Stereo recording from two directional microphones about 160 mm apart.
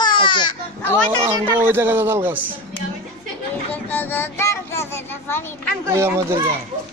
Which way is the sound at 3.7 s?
10° left (ahead or behind).